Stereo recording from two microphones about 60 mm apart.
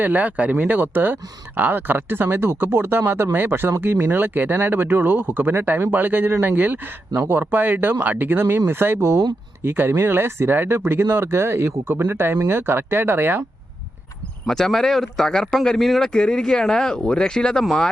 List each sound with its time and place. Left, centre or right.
0.0 s speech: right
9.6 s speech: right
14.4 s a man's voice: centre